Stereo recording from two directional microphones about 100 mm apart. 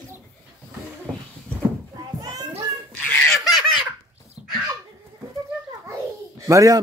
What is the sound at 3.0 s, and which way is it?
Giggle, 15° left (ahead or behind).